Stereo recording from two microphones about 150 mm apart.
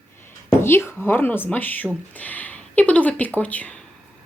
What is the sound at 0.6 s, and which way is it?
Speech, 15° left (ahead or behind).